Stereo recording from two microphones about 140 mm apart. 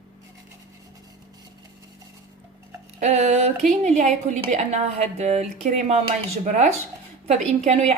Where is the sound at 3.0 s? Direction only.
55° right (ahead or behind).